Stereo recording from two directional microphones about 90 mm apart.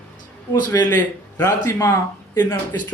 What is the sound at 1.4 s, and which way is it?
Speech, 30° left (ahead or behind).